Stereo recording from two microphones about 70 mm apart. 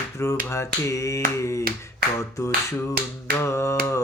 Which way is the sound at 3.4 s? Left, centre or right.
Left.